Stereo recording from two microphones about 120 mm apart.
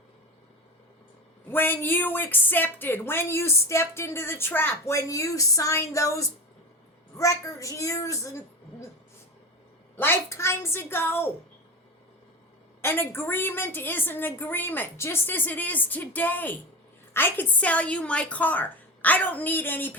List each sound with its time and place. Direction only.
1.5 s a woman's voice: 15° left (ahead or behind)
10.0 s a woman's voice: 20° left (ahead or behind)
12.8 s a woman's voice: 20° left (ahead or behind)